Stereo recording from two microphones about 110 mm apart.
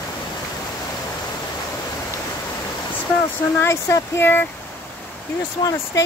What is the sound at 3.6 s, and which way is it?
Speech, 25° left (ahead or behind).